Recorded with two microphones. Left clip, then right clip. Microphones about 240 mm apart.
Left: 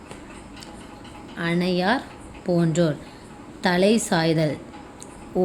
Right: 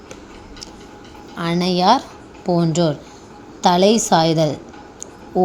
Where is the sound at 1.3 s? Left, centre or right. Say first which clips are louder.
Right 4 dB; centre.